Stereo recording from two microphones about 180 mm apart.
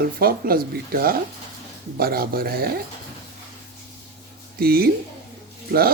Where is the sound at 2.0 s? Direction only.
55° right (ahead or behind).